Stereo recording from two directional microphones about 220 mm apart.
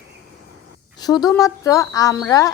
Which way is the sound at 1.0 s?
20° left (ahead or behind).